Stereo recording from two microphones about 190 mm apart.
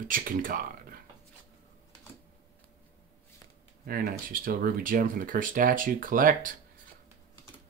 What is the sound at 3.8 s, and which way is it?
Speech, 50° right (ahead or behind).